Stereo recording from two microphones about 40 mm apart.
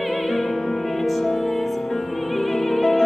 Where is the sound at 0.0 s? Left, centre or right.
Centre.